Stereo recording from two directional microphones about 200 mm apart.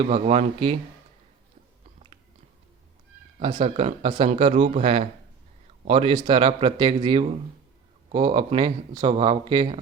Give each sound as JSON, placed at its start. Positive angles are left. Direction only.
{"t": 0.0, "sound": "a man's voice", "side_deg": -30}
{"t": 3.4, "sound": "a man's voice", "side_deg": -25}